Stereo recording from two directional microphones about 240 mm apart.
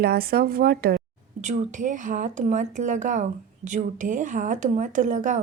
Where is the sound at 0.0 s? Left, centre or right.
Right.